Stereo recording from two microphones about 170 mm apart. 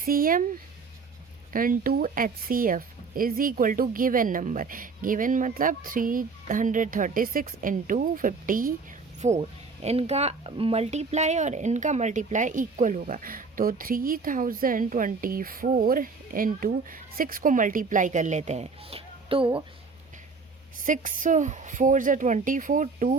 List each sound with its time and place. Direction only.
0.0 s speech: 55° right (ahead or behind)
1.5 s speech: 55° right (ahead or behind)
9.2 s speech: 40° right (ahead or behind)
20.7 s speech: 50° right (ahead or behind)